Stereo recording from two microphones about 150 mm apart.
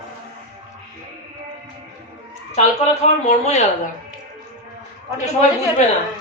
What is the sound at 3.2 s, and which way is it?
Speech, 50° left (ahead or behind).